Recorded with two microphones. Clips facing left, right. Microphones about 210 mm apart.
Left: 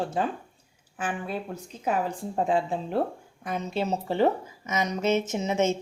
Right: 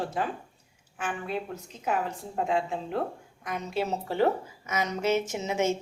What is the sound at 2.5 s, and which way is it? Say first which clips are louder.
Speech: left 2 dB; 35° left (ahead or behind).